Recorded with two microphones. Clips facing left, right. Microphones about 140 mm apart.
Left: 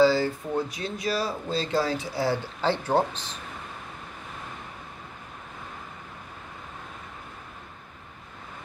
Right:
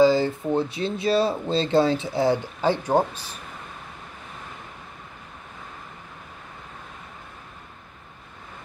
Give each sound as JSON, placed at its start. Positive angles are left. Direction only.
{"t": 0.0, "sound": "speech", "side_deg": -20}